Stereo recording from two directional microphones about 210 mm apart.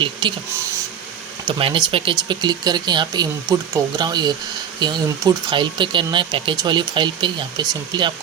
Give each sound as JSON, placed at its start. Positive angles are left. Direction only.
{"t": 0.0, "sound": "speech", "side_deg": -20}
{"t": 1.5, "sound": "speech", "side_deg": -25}